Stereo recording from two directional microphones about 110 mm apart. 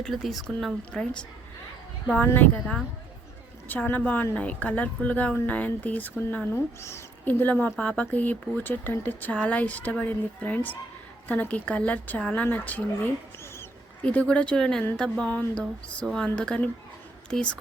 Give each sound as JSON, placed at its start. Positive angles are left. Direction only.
{"t": 0.0, "sound": "speech", "side_deg": 0}
{"t": 3.7, "sound": "speech", "side_deg": 15}
{"t": 14.0, "sound": "speech", "side_deg": 10}